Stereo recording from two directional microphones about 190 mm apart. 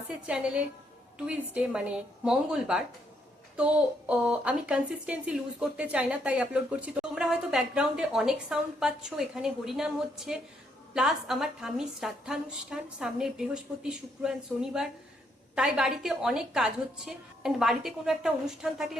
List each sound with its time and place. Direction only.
0.1 s a woman's voice: 5° right (ahead or behind)